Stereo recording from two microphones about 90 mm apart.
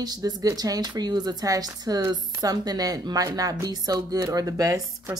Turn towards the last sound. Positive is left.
turn(degrees=-40)  # may be behind; listen again after turning